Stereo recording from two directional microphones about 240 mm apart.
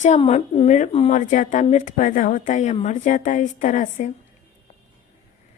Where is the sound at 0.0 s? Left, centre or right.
Left.